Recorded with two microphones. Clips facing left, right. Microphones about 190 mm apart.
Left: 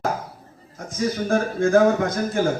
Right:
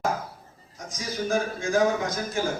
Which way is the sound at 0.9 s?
60° left (ahead or behind).